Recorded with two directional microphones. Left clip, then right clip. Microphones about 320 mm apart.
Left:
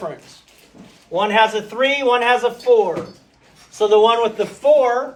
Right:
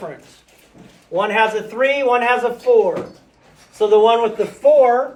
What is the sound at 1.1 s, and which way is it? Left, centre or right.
Speech, centre.